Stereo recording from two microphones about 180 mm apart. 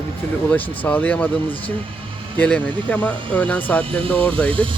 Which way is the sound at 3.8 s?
30° right (ahead or behind).